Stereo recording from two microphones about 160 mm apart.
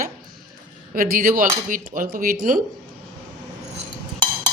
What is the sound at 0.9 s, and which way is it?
Speech, 60° right (ahead or behind).